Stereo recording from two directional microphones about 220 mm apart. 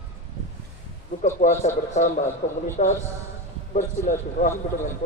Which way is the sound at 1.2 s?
30° left (ahead or behind).